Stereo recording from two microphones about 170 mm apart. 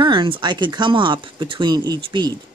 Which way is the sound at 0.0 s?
30° right (ahead or behind).